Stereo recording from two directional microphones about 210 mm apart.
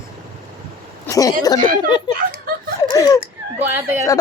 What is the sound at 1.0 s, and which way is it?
Speech, 15° left (ahead or behind).